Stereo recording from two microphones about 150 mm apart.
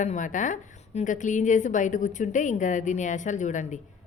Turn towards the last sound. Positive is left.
turn(degrees=55)  # may be behind; listen again after turning